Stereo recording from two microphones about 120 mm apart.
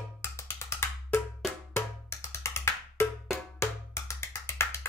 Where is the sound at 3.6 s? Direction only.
20° left (ahead or behind).